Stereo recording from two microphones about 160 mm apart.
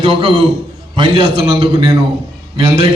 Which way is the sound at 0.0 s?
35° right (ahead or behind).